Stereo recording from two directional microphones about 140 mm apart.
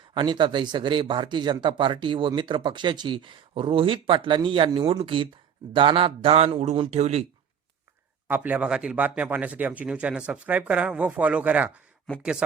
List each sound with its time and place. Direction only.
0.1 s speech: 35° right (ahead or behind); by 7.3 s 50° right (ahead or behind)
8.3 s speech: 10° right (ahead or behind)